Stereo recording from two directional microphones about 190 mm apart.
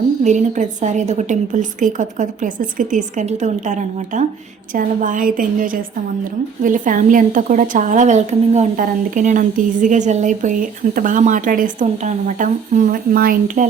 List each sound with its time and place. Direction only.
0.3 s a woman's voice: 40° right (ahead or behind)